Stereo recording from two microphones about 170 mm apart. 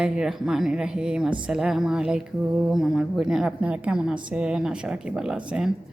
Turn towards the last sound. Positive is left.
turn(degrees=-5)  # may be behind; listen again after turning